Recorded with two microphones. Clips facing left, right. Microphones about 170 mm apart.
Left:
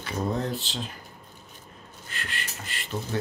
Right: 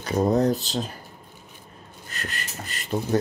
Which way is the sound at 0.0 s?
40° right (ahead or behind).